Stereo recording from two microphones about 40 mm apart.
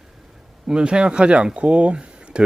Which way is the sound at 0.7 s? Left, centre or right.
Right.